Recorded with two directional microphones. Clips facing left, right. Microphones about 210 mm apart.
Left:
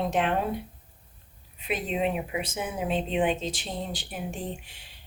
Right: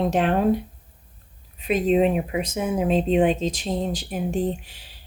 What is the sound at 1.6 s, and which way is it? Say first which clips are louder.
Speech: right 9 dB; 40° right (ahead or behind).